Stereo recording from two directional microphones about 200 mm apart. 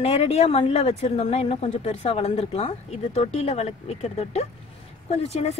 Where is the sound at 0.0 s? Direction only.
30° left (ahead or behind).